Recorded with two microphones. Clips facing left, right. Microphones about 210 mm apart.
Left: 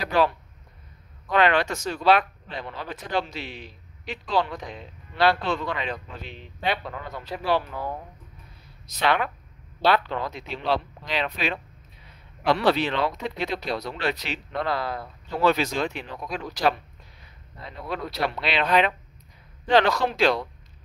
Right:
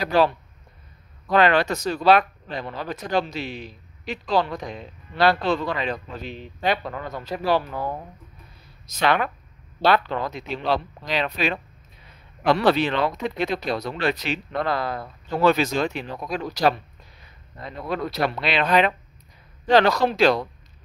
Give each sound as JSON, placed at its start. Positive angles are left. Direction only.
{"t": 0.0, "sound": "speech", "side_deg": -35}
{"t": 1.3, "sound": "speech", "side_deg": -40}